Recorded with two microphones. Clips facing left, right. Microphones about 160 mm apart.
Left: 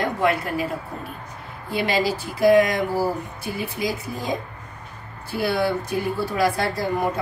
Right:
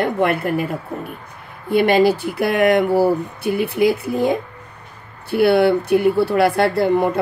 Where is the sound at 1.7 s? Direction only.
55° right (ahead or behind).